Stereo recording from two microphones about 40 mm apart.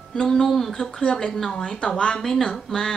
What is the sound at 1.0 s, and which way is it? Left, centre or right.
A woman's voice, left.